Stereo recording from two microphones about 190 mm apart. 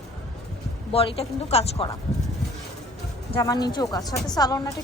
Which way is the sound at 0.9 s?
30° left (ahead or behind).